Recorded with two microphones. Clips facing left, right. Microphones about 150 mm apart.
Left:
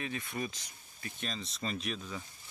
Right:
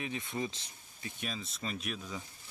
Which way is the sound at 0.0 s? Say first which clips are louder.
Right 1 dB; 20° right (ahead or behind).